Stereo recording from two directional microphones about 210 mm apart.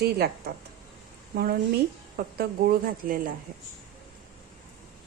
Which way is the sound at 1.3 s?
45° right (ahead or behind).